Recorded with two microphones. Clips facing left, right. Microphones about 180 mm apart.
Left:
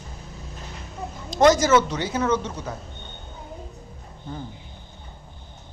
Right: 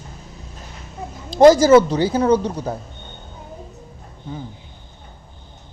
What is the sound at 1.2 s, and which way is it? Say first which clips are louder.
Speech: right 7 dB; 30° right (ahead or behind).